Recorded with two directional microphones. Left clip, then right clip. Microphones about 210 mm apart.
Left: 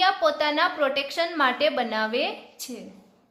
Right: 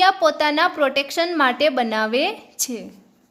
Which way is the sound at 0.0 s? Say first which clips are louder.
Right 5 dB; 35° right (ahead or behind).